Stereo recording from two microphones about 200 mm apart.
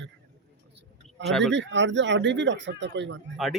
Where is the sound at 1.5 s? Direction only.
65° right (ahead or behind).